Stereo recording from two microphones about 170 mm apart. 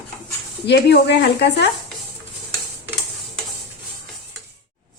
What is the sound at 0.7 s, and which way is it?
Speech, 70° left (ahead or behind).